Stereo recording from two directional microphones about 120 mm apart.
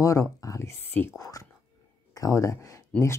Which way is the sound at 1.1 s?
30° left (ahead or behind).